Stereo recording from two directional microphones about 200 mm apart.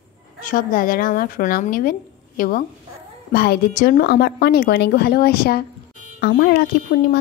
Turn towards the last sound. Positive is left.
turn(degrees=50)  # may be behind; listen again after turning